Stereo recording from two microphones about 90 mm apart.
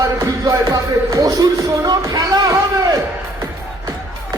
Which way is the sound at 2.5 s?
50° right (ahead or behind).